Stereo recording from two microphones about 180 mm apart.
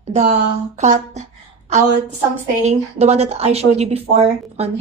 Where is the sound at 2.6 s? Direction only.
40° right (ahead or behind).